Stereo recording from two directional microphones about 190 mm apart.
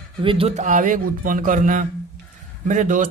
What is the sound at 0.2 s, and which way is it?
A man's voice, 30° right (ahead or behind).